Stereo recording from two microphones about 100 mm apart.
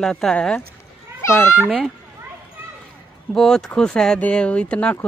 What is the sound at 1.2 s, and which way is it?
Speech, 25° left (ahead or behind).